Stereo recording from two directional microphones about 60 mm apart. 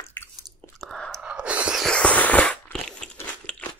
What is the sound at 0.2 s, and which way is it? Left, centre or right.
Chewing, left.